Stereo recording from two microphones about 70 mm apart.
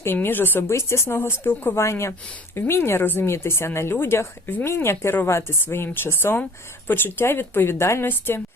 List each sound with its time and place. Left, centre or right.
0.0 s speech: left
0.7 s speech: left